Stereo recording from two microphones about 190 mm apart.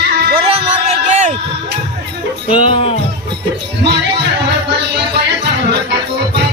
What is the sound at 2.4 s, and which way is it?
Music, 30° left (ahead or behind).